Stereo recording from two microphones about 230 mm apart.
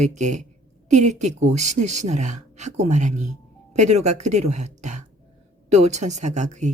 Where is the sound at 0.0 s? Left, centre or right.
Right.